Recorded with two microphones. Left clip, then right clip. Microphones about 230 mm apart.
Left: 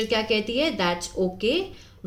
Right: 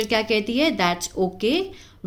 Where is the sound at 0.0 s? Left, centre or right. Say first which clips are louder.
Right 2 dB; right.